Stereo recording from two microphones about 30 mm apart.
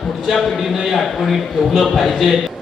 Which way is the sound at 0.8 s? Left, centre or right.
Centre.